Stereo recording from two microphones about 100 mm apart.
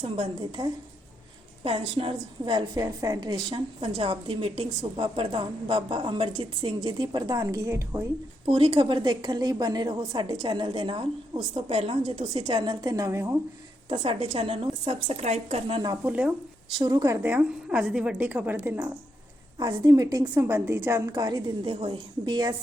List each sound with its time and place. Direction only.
0.0 s a woman's voice: 60° right (ahead or behind)
2.4 s a woman's voice: 50° right (ahead or behind)
2.7 s a woman's voice: 40° right (ahead or behind)
7.4 s a woman's voice: 30° right (ahead or behind)
8.4 s a woman's voice: 70° right (ahead or behind)
11.5 s a woman's voice: 75° right (ahead or behind); by 13.3 s 30° right (ahead or behind)
14.0 s speech: 70° right (ahead or behind)
16.0 s a woman's voice: 10° right (ahead or behind)
16.7 s a woman's voice: 45° right (ahead or behind)
17.1 s a woman's voice: 15° right (ahead or behind)
19.5 s a woman's voice: 40° right (ahead or behind)
20.3 s a woman's voice: 25° right (ahead or behind)
21.2 s a woman's voice: 45° right (ahead or behind)
21.7 s a woman's voice: 60° right (ahead or behind)